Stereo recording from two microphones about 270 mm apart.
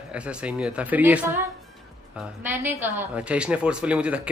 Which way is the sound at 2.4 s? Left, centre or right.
Centre.